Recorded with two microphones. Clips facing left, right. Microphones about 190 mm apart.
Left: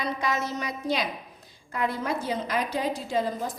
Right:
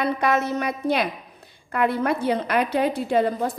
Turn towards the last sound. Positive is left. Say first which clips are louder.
# right 7 dB
turn(degrees=-60)  # may be behind; listen again after turning